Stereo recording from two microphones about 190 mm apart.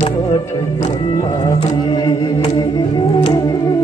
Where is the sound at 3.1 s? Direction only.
25° left (ahead or behind).